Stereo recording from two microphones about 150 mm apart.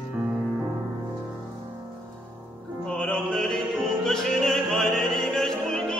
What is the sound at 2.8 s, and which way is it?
Music, 5° left (ahead or behind).